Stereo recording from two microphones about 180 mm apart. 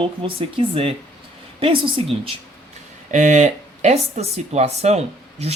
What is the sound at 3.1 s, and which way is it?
Speech, 40° right (ahead or behind).